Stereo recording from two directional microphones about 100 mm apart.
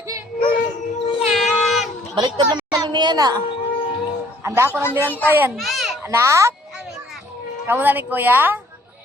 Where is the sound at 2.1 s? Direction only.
50° right (ahead or behind).